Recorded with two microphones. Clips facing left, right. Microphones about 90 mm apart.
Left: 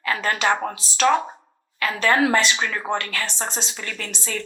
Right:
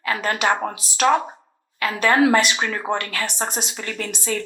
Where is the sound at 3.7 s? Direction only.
35° right (ahead or behind).